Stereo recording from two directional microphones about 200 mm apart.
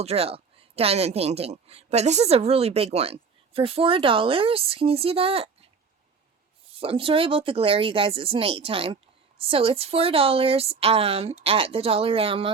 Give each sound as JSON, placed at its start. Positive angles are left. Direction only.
{"t": 0.0, "sound": "a woman's voice", "side_deg": -30}
{"t": 6.7, "sound": "a woman's voice", "side_deg": -25}